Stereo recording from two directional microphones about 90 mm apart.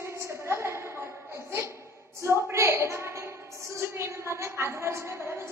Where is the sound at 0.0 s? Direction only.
30° right (ahead or behind).